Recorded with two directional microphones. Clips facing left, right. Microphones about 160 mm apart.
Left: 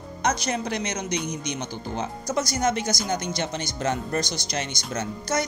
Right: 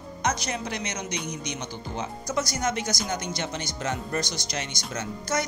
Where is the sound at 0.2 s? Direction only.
40° left (ahead or behind).